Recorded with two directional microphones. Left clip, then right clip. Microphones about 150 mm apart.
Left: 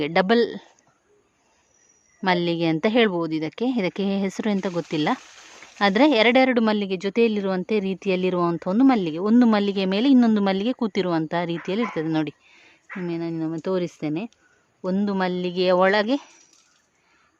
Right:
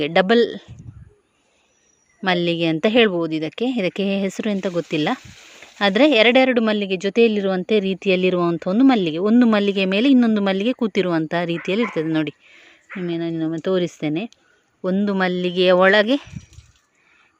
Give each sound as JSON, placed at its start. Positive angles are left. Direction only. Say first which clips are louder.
{"t": 0.0, "sound": "speech", "louder": "right 4 dB", "side_deg": 0}
{"t": 2.2, "sound": "a woman's voice", "louder": "right 2 dB", "side_deg": 0}